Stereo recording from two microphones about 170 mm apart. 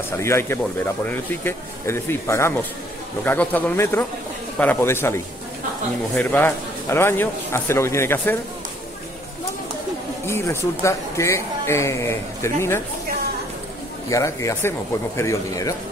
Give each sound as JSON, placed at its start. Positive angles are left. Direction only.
{"t": 0.2, "sound": "speech", "side_deg": 15}
{"t": 10.2, "sound": "speech", "side_deg": 15}
{"t": 14.0, "sound": "speech", "side_deg": 20}